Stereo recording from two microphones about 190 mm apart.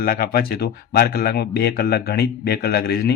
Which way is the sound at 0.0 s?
50° left (ahead or behind).